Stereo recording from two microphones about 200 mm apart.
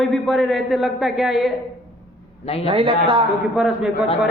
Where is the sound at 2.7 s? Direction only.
25° right (ahead or behind).